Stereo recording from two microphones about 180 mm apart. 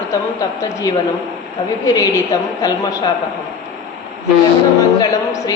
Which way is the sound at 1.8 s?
20° left (ahead or behind).